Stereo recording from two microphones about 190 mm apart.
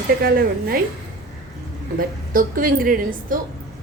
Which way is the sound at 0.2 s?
55° right (ahead or behind).